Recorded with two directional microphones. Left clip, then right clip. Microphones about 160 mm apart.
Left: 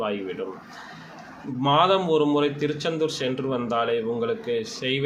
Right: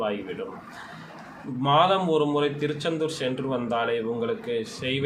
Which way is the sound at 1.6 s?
20° left (ahead or behind).